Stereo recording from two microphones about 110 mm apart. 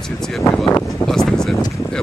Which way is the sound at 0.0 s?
5° left (ahead or behind).